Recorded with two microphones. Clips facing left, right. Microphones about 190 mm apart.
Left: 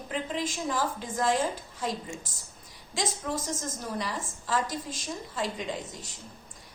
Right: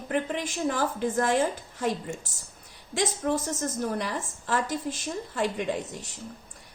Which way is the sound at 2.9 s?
65° right (ahead or behind).